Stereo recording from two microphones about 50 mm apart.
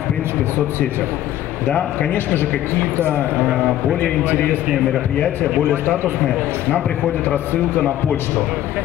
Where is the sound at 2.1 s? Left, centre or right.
Left.